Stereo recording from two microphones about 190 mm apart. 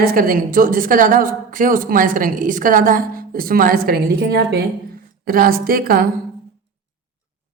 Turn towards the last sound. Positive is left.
turn(degrees=-50)  # may be behind; listen again after turning